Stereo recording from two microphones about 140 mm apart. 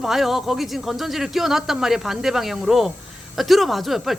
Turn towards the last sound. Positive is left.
turn(degrees=0)  # may be behind; listen again after turning